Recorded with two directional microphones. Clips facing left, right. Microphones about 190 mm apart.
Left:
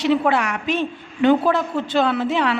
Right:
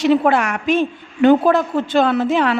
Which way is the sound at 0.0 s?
50° right (ahead or behind).